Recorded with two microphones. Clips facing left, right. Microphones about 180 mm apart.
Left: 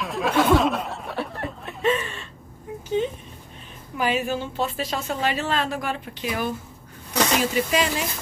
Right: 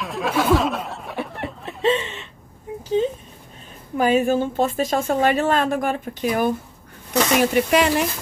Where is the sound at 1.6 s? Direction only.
25° right (ahead or behind).